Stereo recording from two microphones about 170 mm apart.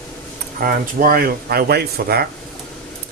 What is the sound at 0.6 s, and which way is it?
Speech, 55° right (ahead or behind).